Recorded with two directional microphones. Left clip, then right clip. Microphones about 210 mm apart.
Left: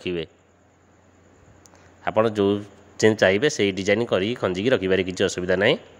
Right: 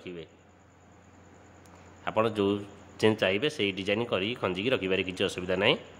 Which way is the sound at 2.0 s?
20° left (ahead or behind).